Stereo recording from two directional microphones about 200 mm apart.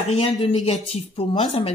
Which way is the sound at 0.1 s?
25° left (ahead or behind).